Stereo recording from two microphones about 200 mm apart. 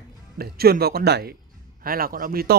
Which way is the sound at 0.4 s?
50° right (ahead or behind).